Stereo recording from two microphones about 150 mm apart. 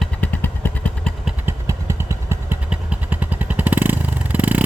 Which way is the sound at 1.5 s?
15° right (ahead or behind).